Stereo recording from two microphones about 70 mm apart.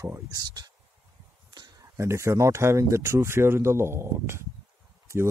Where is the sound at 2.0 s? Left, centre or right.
Right.